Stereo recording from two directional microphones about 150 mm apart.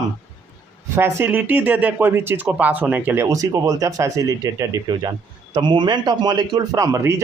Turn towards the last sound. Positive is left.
turn(degrees=-20)  # may be behind; listen again after turning